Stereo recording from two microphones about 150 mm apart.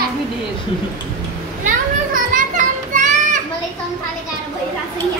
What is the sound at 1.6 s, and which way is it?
Children playing, 60° right (ahead or behind).